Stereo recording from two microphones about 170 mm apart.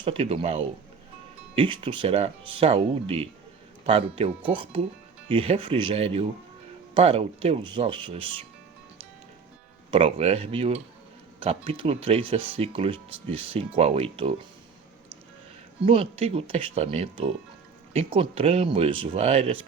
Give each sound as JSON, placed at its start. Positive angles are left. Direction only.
{"t": 0.0, "sound": "speech", "side_deg": -35}
{"t": 4.5, "sound": "speech", "side_deg": -30}
{"t": 9.9, "sound": "speech", "side_deg": -35}
{"t": 15.8, "sound": "speech", "side_deg": -35}